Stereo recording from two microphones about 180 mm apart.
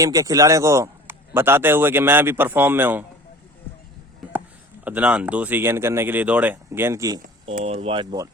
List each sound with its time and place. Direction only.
0.0 s a man's voice: 20° right (ahead or behind)
4.9 s a man's voice: 5° right (ahead or behind)
7.6 s speech: 35° right (ahead or behind)